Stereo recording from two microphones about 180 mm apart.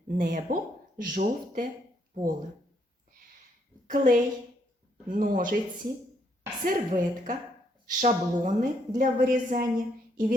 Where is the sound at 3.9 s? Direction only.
45° right (ahead or behind).